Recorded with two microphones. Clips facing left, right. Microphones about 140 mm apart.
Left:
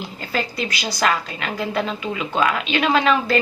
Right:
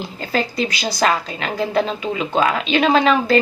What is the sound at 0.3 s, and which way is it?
A woman's voice, 30° right (ahead or behind).